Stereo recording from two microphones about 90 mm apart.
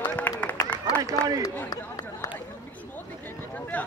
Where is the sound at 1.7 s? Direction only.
45° left (ahead or behind).